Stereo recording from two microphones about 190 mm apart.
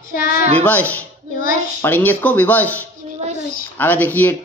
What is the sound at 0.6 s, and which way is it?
Speech, 10° left (ahead or behind).